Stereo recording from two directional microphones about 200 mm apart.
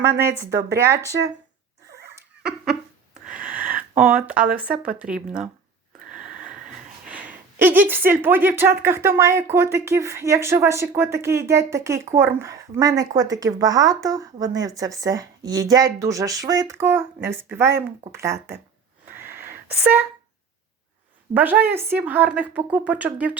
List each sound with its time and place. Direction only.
0.2 s speech: 15° right (ahead or behind)
2.4 s a sound: 5° right (ahead or behind)
3.2 s a sound: 45° right (ahead or behind)
4.4 s speech: 45° right (ahead or behind)
5.1 s speech: 5° right (ahead or behind)
7.1 s a sound: 5° right (ahead or behind)
7.6 s speech: 10° right (ahead or behind)
19.0 s wheeze: 10° right (ahead or behind)
19.8 s speech: 10° right (ahead or behind)
21.3 s speech: 10° right (ahead or behind)